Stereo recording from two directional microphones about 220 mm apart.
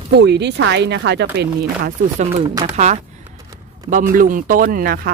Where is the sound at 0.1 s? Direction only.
50° right (ahead or behind).